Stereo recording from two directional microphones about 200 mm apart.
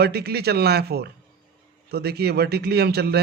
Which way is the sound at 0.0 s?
55° right (ahead or behind).